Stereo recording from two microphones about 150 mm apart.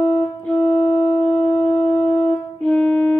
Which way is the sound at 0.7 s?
50° left (ahead or behind).